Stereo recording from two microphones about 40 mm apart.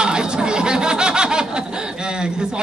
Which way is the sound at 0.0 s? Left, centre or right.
Centre.